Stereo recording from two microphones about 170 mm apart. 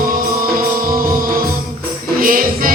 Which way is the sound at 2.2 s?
55° right (ahead or behind).